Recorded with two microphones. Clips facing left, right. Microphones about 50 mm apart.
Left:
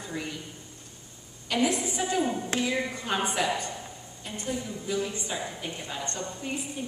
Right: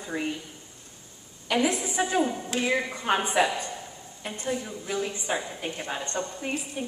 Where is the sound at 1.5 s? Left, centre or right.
Right.